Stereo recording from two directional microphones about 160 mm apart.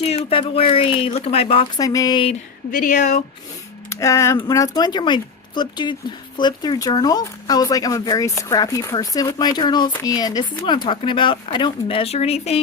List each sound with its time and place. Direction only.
0.0 s speech: 40° left (ahead or behind)
1.7 s speech: 20° left (ahead or behind)
2.7 s speech: 55° left (ahead or behind)
3.8 s speech: 20° left (ahead or behind); by 12.6 s 40° left (ahead or behind)